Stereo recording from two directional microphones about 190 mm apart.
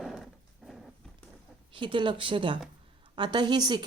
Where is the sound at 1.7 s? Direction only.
25° right (ahead or behind).